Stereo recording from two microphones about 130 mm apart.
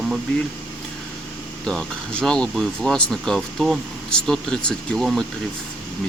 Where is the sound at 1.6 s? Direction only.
5° left (ahead or behind).